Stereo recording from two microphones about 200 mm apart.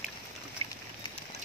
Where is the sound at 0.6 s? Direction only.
30° right (ahead or behind).